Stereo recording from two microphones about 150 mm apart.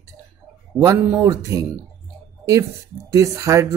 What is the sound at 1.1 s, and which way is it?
Speech, 20° right (ahead or behind).